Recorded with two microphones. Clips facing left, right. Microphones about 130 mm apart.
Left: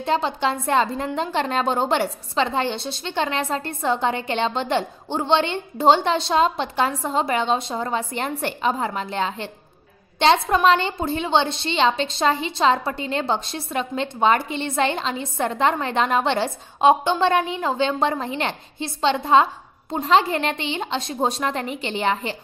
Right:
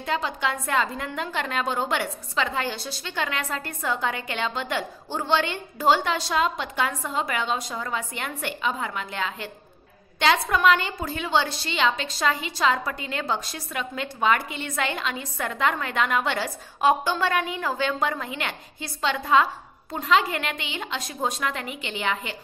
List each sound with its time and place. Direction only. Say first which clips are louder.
0.0 s a woman's voice: left 5 dB; 30° left (ahead or behind)